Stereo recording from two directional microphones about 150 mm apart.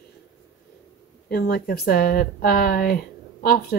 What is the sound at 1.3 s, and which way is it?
Speech, 90° left.